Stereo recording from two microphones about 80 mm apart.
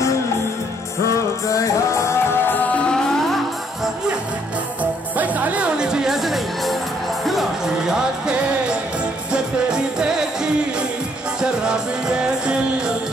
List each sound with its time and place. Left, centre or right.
1.5 s music: left
2.9 s music: centre
5.1 s music: centre
7.9 s music: centre